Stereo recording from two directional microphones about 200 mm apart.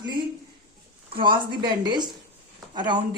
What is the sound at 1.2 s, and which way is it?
Speech, 20° right (ahead or behind).